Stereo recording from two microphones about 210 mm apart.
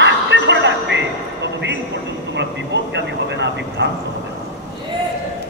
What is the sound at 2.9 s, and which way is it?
Vehicle, 55° right (ahead or behind).